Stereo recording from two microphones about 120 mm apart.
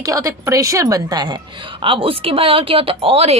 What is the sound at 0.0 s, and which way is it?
A woman's voice, 30° right (ahead or behind).